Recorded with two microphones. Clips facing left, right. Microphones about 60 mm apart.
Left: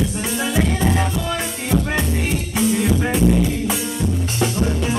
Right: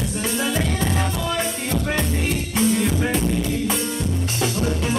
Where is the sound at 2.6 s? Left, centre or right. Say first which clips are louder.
Left 2 dB; centre.